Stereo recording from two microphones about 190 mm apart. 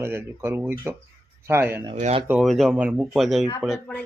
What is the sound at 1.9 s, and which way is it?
Speech, 35° right (ahead or behind).